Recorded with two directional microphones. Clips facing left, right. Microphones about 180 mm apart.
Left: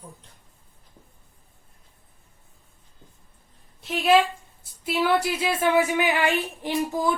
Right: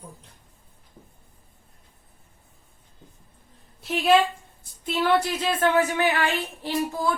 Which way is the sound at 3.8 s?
Centre (ahead or behind).